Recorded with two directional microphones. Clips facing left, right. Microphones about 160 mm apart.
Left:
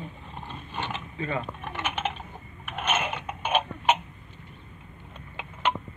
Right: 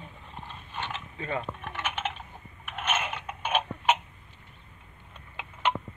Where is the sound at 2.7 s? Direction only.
10° left (ahead or behind).